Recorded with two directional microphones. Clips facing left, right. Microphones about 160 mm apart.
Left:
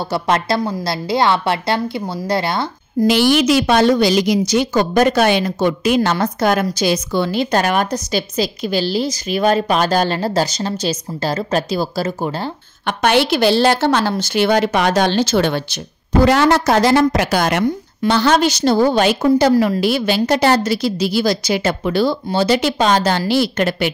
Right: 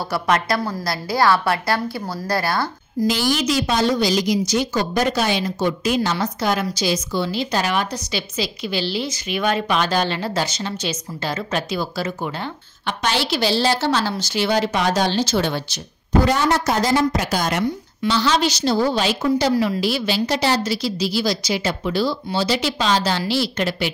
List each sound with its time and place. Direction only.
0.1 s a woman's voice: 25° left (ahead or behind)
3.0 s a woman's voice: 70° left (ahead or behind); by 12.5 s 35° left (ahead or behind)
12.8 s a woman's voice: 55° left (ahead or behind)
16.3 s a woman's voice: 85° left; by 23.9 s 55° left (ahead or behind)